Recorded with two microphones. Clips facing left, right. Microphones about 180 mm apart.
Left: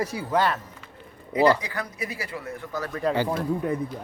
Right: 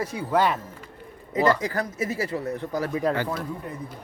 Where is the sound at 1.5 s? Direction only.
45° right (ahead or behind).